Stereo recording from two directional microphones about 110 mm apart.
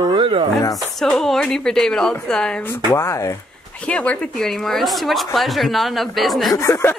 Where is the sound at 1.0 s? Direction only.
5° left (ahead or behind).